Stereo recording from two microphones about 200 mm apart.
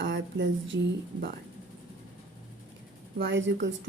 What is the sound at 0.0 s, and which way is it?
Speech, 65° right (ahead or behind).